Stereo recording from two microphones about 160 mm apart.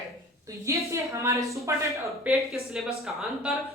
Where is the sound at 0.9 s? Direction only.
20° right (ahead or behind).